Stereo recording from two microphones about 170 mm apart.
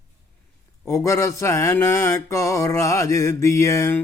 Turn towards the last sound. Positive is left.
turn(degrees=15)  # may be behind; listen again after turning